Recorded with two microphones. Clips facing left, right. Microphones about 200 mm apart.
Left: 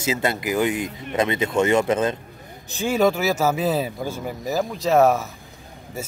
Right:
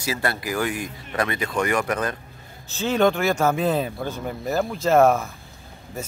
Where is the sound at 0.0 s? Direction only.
20° left (ahead or behind).